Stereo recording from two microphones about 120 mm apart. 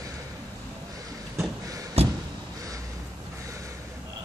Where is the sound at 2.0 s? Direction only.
60° right (ahead or behind).